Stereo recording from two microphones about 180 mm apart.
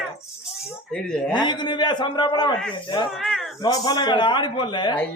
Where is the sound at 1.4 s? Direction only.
25° left (ahead or behind).